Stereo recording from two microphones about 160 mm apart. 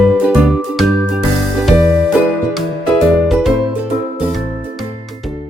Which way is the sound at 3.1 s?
Centre (ahead or behind).